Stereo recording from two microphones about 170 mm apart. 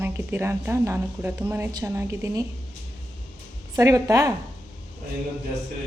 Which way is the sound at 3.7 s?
20° right (ahead or behind).